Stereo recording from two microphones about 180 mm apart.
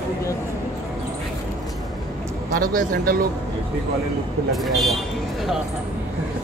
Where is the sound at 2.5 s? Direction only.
50° right (ahead or behind).